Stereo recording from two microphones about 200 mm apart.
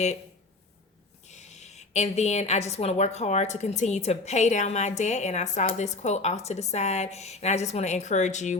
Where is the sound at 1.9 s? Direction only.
35° left (ahead or behind).